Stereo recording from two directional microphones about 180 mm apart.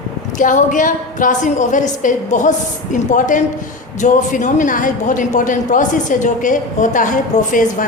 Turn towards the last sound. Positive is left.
turn(degrees=45)  # may be behind; listen again after turning